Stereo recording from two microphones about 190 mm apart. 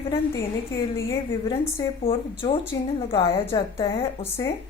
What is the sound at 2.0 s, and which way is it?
Speech, 30° left (ahead or behind).